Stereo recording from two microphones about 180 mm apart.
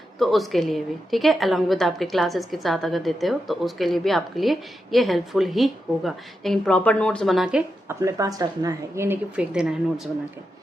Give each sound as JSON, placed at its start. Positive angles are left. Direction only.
{"t": 0.2, "sound": "a woman's voice", "side_deg": 0}
{"t": 8.0, "sound": "a woman's voice", "side_deg": -20}